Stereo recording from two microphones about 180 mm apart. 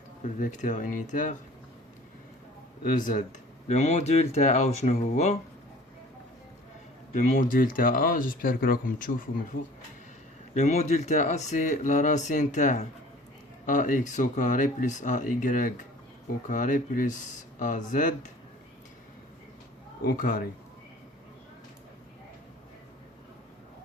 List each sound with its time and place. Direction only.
0.3 s speech: 45° left (ahead or behind)
2.8 s speech: 50° left (ahead or behind)
3.7 s speech: 40° left (ahead or behind)
7.1 s speech: 45° left (ahead or behind)
10.5 s speech: 40° left (ahead or behind)
20.0 s speech: 55° left (ahead or behind)